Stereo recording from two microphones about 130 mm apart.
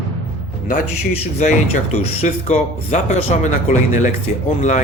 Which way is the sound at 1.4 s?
65° left (ahead or behind).